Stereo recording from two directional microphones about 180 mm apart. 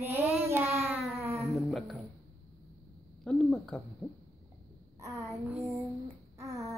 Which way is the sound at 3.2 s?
5° left (ahead or behind).